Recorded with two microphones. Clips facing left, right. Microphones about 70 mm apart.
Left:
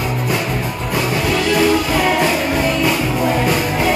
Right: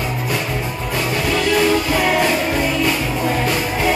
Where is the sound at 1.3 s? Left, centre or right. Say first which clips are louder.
Left 1 dB; centre.